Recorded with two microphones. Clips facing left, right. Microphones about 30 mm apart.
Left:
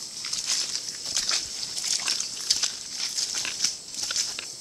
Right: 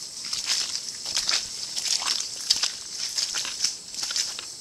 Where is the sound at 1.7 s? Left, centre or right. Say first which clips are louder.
Right 2 dB; right.